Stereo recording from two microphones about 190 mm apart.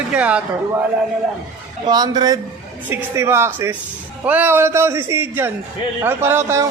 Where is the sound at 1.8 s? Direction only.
20° right (ahead or behind).